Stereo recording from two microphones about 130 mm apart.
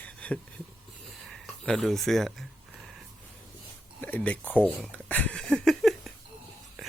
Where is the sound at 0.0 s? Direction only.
10° left (ahead or behind).